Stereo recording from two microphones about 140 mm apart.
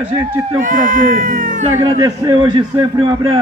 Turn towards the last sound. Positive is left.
turn(degrees=-35)  # may be behind; listen again after turning